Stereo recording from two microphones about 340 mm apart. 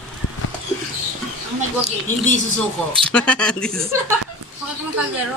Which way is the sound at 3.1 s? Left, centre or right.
Centre.